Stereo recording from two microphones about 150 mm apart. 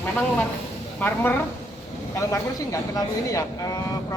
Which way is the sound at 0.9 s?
10° left (ahead or behind).